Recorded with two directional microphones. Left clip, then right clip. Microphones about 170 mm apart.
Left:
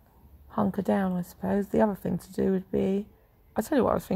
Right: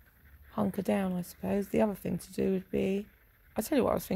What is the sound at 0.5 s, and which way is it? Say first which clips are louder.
Speech: left 4 dB; 15° right (ahead or behind).